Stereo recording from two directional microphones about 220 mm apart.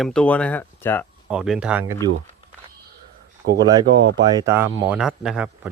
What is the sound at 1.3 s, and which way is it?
Speech, 5° right (ahead or behind).